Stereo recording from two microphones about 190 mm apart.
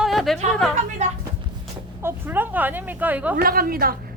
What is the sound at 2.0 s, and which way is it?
Speech, 10° right (ahead or behind).